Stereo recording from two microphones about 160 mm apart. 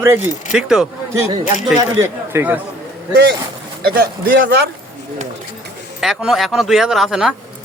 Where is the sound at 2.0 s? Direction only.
15° right (ahead or behind).